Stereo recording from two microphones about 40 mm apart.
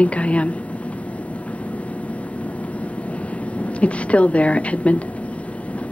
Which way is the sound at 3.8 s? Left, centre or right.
Left.